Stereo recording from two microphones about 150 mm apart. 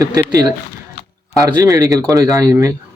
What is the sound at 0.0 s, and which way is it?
Speech, 25° right (ahead or behind).